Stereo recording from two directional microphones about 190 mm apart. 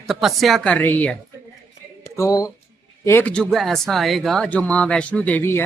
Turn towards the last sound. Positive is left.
turn(degrees=10)  # may be behind; listen again after turning